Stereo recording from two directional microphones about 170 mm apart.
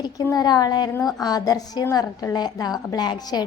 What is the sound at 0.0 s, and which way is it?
A woman's voice, 25° left (ahead or behind).